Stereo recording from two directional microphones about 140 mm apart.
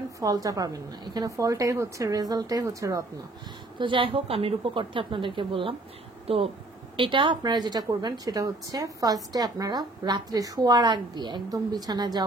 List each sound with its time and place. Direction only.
0.2 s a woman's voice: 25° right (ahead or behind)
3.7 s a woman's voice: 35° right (ahead or behind)